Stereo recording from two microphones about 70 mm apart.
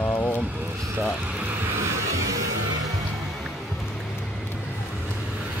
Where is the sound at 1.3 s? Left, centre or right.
Right.